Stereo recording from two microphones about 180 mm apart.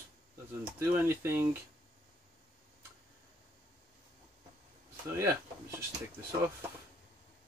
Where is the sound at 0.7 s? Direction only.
15° right (ahead or behind).